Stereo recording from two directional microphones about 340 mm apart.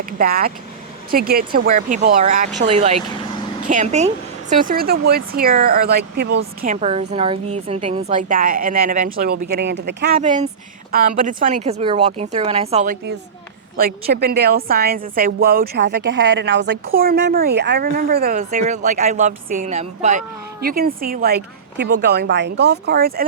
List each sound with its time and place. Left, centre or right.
0.0 s a woman's voice: right